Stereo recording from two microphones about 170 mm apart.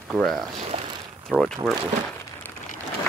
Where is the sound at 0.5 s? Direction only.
35° right (ahead or behind).